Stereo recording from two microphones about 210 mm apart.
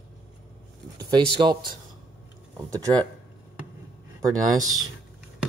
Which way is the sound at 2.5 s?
15° right (ahead or behind).